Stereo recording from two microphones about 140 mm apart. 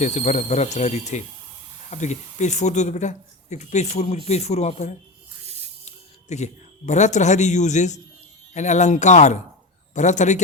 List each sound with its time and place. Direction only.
0.0 s speech: 55° left (ahead or behind)